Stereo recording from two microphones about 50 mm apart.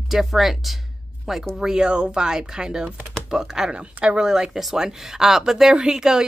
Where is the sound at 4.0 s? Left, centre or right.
Right.